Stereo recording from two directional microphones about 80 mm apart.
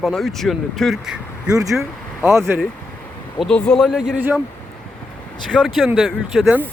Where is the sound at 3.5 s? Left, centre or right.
Centre.